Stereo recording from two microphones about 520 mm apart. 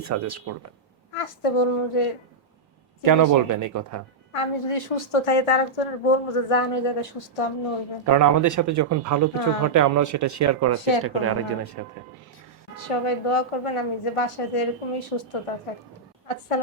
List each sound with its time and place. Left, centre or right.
0.0 s speech: right
1.1 s a woman's voice: left
3.0 s speech: right
4.3 s a woman's voice: left
8.1 s speech: right
12.9 s a woman's voice: left